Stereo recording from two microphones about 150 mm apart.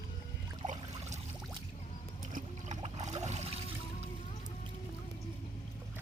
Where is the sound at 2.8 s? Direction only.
50° right (ahead or behind).